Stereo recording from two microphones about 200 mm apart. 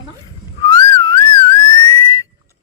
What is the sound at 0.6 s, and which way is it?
Whistling, 20° left (ahead or behind).